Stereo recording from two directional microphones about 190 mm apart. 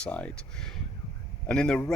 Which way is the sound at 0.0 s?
5° left (ahead or behind).